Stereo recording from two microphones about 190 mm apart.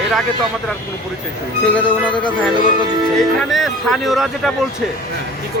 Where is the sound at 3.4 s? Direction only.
Centre (ahead or behind).